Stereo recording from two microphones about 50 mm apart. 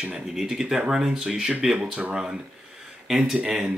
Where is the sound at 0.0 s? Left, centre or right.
Centre.